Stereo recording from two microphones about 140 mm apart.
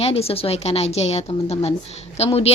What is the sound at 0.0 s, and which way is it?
A woman's voice, 45° left (ahead or behind).